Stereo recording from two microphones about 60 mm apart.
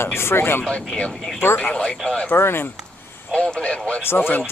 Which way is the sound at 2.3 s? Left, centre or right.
Left.